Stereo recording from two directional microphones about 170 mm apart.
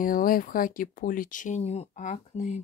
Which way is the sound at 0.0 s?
55° left (ahead or behind).